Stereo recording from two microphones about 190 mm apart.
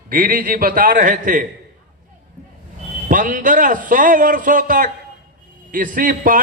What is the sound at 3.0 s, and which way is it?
A man's voice, 45° right (ahead or behind).